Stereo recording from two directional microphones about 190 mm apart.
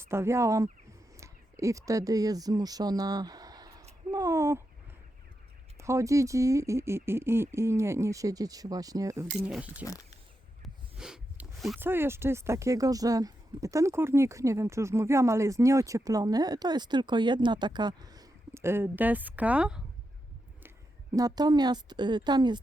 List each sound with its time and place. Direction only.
0.0 s speech: 15° right (ahead or behind)
5.7 s speech: 15° right (ahead or behind)
9.3 s speech: 5° right (ahead or behind)
10.6 s a sound: 5° right (ahead or behind)
11.8 s a woman's voice: 10° right (ahead or behind)